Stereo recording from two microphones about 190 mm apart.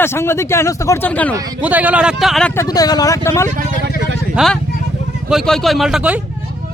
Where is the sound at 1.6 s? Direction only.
10° right (ahead or behind).